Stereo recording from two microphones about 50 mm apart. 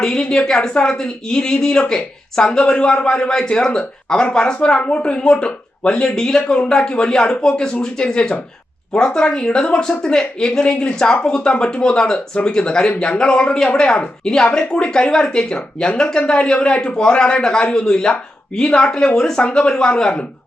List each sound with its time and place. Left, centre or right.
0.0 s a woman's voice: centre